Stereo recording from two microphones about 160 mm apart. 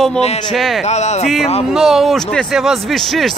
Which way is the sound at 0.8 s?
45° left (ahead or behind).